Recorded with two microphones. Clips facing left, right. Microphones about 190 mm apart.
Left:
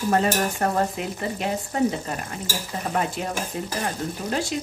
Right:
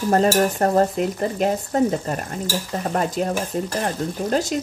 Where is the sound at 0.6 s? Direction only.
40° right (ahead or behind).